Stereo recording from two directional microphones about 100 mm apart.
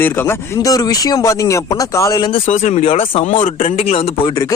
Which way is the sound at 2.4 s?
75° left (ahead or behind).